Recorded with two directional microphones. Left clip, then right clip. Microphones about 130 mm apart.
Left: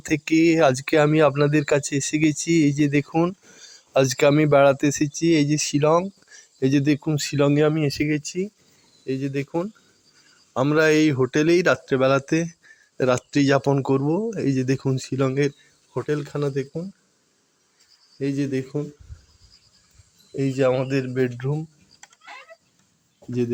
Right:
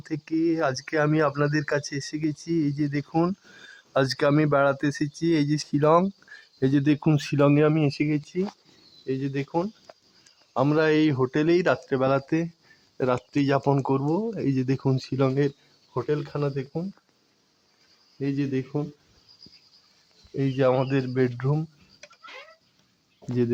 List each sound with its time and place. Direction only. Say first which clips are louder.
0.0 s speech: left 7 dB; 40° left (ahead or behind)
3.1 s speech: left 3 dB; 15° left (ahead or behind)
3.6 s speech: left 4 dB; 30° left (ahead or behind)
6.3 s a sound: left 3 dB; 15° left (ahead or behind)
7.2 s speech: left 2 dB; 10° left (ahead or behind); by 13.6 s 30° left (ahead or behind)
13.6 s speech: left 3 dB; 15° left (ahead or behind)
14.4 s speech: left 3 dB; 5° left (ahead or behind)
18.2 s speech: left 3 dB; 10° left (ahead or behind)
20.3 s speech: left 2 dB; centre (ahead or behind)